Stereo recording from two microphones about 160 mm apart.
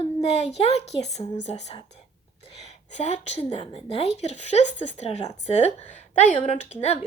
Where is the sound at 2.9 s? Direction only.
45° left (ahead or behind).